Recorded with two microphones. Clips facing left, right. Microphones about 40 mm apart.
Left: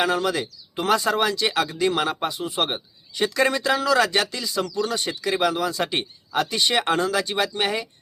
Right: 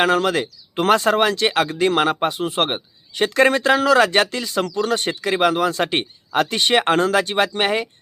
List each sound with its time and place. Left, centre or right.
0.0 s speech: right
2.6 s speech: right